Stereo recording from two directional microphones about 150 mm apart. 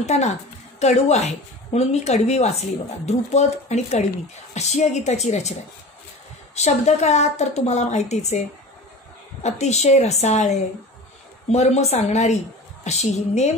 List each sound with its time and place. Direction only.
0.0 s a woman's voice: 50° left (ahead or behind)
9.4 s a woman's voice: 50° left (ahead or behind)